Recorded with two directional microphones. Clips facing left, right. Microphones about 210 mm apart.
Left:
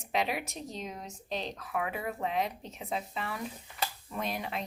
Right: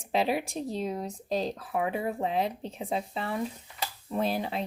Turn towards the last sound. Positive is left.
turn(degrees=-30)  # may be behind; listen again after turning